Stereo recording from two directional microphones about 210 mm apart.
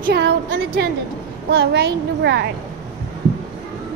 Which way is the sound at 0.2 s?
60° right (ahead or behind).